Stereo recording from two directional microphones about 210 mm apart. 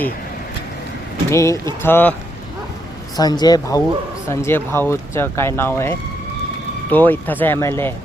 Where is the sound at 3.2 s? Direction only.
20° left (ahead or behind).